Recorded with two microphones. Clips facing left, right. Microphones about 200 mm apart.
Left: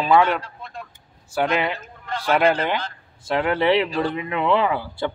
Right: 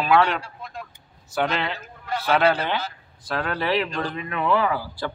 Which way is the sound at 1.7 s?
5° right (ahead or behind).